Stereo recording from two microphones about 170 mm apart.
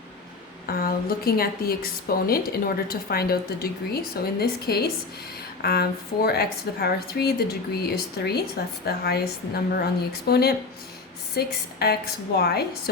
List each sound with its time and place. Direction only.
0.7 s a woman's voice: 60° left (ahead or behind)